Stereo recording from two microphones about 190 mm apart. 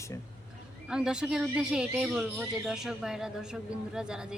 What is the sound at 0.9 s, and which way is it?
Speech, 5° right (ahead or behind).